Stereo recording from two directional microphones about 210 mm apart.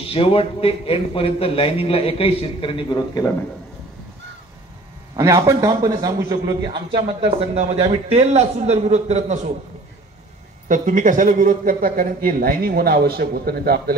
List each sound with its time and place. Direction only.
0.1 s a man's voice: 25° left (ahead or behind)
5.1 s a man's voice: 15° right (ahead or behind); by 9.5 s 35° right (ahead or behind)
10.7 s speech: 40° right (ahead or behind)